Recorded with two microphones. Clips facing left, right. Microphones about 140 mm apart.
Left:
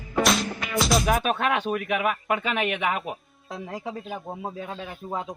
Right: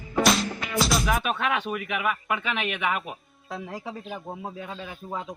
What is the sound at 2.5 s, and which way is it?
Speech, 45° left (ahead or behind).